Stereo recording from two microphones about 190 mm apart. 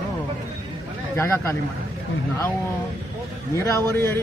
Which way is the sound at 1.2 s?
15° left (ahead or behind).